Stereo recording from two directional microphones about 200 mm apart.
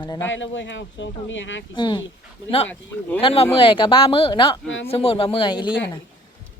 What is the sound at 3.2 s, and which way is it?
Speech, 25° left (ahead or behind).